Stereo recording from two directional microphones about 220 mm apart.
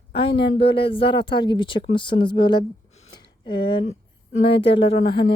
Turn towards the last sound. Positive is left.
turn(degrees=25)  # may be behind; listen again after turning